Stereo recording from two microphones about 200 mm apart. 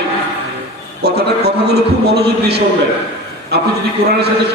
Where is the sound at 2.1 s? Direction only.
55° right (ahead or behind).